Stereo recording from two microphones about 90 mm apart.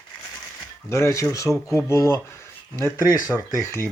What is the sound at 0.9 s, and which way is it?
Speech, 30° left (ahead or behind).